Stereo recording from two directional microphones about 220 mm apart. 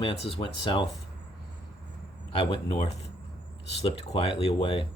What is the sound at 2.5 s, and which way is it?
Speech, 20° left (ahead or behind).